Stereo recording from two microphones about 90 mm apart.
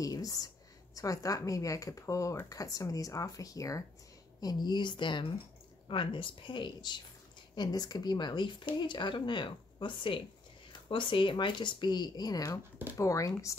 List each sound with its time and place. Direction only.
0.0 s speech: 40° left (ahead or behind)
4.4 s speech: 50° left (ahead or behind); by 13.6 s 35° left (ahead or behind)